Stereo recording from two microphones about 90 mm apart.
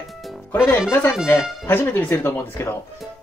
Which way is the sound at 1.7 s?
25° left (ahead or behind).